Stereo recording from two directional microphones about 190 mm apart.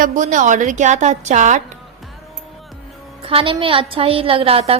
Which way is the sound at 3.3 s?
25° right (ahead or behind).